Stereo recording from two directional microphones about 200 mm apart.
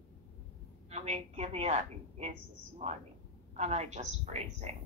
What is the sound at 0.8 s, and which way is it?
Speech, 35° right (ahead or behind).